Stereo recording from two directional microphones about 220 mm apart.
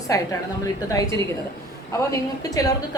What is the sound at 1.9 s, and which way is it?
Speech, 15° left (ahead or behind).